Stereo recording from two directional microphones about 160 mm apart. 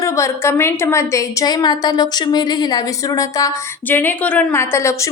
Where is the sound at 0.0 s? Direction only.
20° left (ahead or behind).